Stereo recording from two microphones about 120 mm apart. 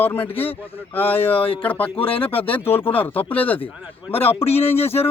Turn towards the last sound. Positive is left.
turn(degrees=20)  # may be behind; listen again after turning